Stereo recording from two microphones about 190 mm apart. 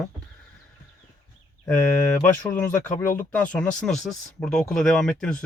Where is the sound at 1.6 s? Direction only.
15° left (ahead or behind).